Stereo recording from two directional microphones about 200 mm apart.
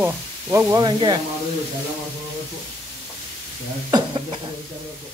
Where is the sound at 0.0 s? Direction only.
15° right (ahead or behind).